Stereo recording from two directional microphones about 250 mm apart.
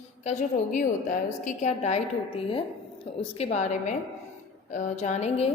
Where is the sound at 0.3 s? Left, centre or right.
Left.